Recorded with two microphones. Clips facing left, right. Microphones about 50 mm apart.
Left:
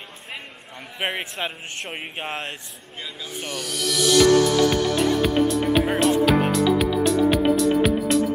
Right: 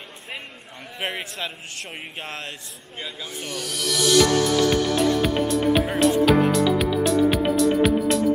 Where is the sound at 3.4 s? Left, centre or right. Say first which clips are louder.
Left 1 dB; centre.